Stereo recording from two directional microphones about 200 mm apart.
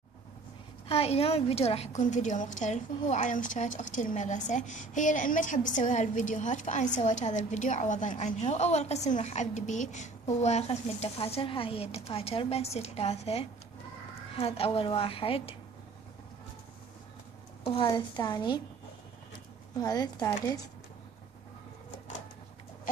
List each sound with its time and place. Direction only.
0.8 s a woman's voice: 30° left (ahead or behind)
17.6 s a woman's voice: 20° left (ahead or behind)
19.8 s a woman's voice: 20° left (ahead or behind)